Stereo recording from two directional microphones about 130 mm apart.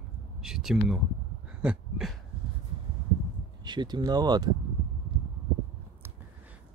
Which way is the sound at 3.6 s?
35° right (ahead or behind).